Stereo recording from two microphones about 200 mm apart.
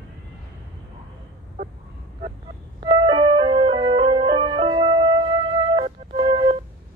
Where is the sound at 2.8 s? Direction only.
25° right (ahead or behind).